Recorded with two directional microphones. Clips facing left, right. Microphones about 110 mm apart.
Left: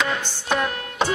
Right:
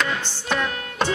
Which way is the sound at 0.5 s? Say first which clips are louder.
Left 1 dB; 15° left (ahead or behind).